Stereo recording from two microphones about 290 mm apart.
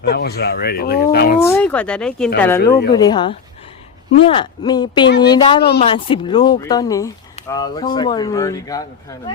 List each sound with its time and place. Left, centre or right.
0.1 s speech: left
1.5 s speech: centre
5.0 s speech: left
5.3 s speech: centre